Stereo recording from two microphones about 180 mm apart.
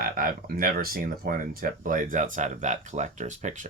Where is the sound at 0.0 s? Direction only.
55° right (ahead or behind).